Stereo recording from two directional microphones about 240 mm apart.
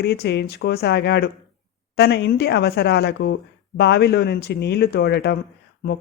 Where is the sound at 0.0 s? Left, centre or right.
Left.